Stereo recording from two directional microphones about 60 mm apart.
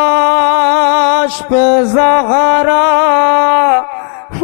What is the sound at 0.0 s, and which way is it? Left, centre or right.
Music, left.